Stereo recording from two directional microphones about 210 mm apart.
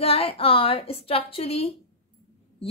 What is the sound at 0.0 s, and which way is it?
A woman's voice, 25° left (ahead or behind).